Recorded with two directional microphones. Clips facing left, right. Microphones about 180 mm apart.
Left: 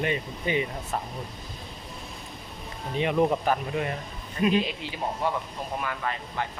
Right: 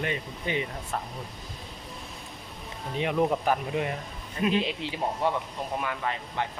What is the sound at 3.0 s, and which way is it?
Speech, centre (ahead or behind).